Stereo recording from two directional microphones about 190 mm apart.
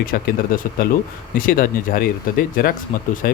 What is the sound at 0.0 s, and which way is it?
Speech, 50° left (ahead or behind).